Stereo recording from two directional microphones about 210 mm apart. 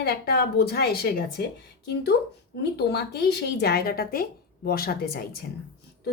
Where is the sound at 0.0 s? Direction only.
50° left (ahead or behind).